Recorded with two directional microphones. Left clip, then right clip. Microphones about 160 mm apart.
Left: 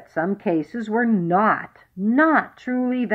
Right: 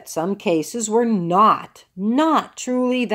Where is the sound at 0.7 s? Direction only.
25° right (ahead or behind).